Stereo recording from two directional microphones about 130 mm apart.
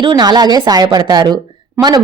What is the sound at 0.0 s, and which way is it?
Speech, 30° right (ahead or behind).